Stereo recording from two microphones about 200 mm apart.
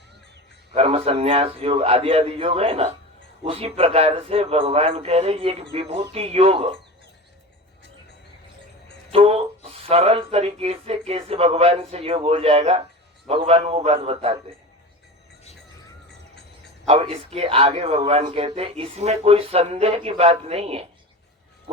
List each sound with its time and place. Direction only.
0.7 s speech: 30° right (ahead or behind)
9.1 s a sound: 30° right (ahead or behind)
9.8 s speech: 30° right (ahead or behind)
16.8 s speech: 30° right (ahead or behind)